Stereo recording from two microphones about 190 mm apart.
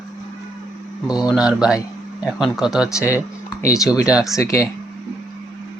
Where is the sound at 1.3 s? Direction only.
5° right (ahead or behind).